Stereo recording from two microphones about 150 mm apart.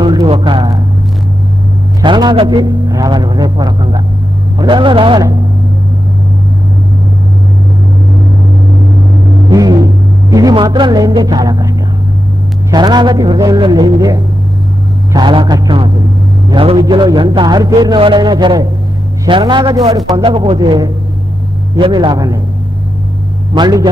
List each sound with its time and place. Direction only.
0.0 s speech: 30° right (ahead or behind)
2.0 s a man's voice: 30° right (ahead or behind)
9.5 s vehicle: 25° right (ahead or behind)
10.3 s a man's voice: 30° right (ahead or behind)
12.7 s a man's voice: 30° right (ahead or behind)
23.5 s a man's voice: 30° right (ahead or behind)